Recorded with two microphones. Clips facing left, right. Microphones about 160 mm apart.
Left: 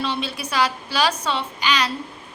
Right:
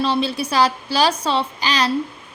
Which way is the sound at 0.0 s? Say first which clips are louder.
Right 6 dB; 35° right (ahead or behind).